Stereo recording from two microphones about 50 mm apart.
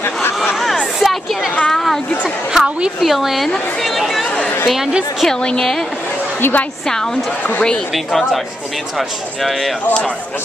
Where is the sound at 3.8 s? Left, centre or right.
Centre.